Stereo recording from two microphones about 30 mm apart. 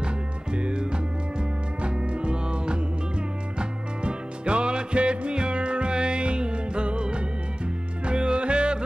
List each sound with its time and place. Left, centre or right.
0.0 s music: right